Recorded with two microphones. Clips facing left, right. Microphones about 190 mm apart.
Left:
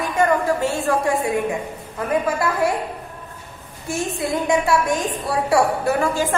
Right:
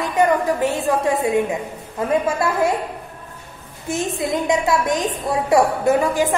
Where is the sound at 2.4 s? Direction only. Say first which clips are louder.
Right 1 dB; 20° right (ahead or behind).